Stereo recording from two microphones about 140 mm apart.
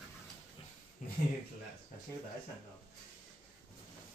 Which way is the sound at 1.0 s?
75° left (ahead or behind).